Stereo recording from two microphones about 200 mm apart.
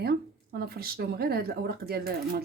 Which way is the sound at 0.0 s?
50° right (ahead or behind).